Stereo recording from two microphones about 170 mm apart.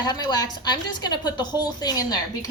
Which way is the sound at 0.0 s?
25° left (ahead or behind).